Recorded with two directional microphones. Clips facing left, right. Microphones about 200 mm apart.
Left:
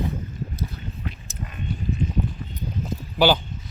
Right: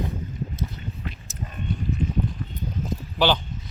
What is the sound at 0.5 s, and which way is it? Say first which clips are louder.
Boat: even; 20° right (ahead or behind).